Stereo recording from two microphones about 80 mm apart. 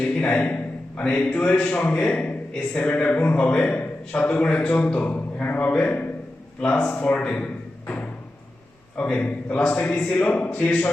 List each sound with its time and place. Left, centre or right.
0.0 s a man's voice: centre